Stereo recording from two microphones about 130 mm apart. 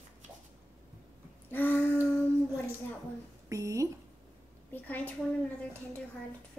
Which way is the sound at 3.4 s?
25° right (ahead or behind).